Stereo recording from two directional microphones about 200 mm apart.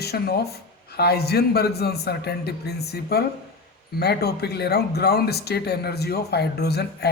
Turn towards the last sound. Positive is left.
turn(degrees=55)  # may be behind; listen again after turning